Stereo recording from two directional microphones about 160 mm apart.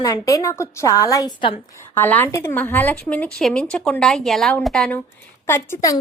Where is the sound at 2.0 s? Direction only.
10° left (ahead or behind).